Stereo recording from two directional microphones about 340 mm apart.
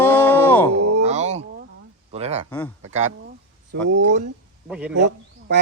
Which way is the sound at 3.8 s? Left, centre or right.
Right.